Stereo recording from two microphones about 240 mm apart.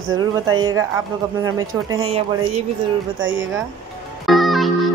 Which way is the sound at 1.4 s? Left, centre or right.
Centre.